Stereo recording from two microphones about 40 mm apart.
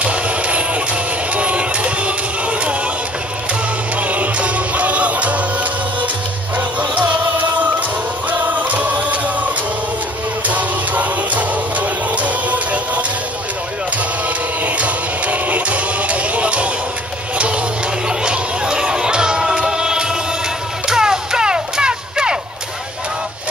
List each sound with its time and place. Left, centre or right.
0.0 s music: right
4.1 s music: right
10.5 s music: right
14.6 s music: right
18.0 s music: right